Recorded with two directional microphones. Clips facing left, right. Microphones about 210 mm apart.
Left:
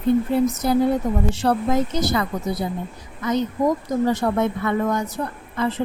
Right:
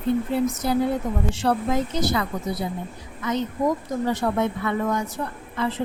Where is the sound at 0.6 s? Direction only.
45° left (ahead or behind).